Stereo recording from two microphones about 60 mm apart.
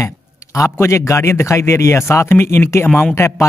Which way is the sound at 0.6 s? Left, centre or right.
Left.